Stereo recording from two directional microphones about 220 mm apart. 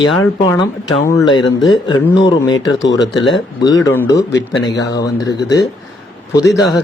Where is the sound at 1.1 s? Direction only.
20° left (ahead or behind).